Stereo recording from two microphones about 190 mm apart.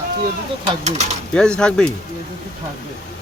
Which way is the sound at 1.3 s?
5° left (ahead or behind).